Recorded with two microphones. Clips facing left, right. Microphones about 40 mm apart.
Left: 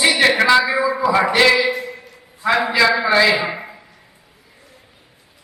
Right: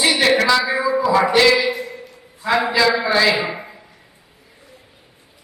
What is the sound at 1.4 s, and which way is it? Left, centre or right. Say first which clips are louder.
Speech: left 1 dB; centre.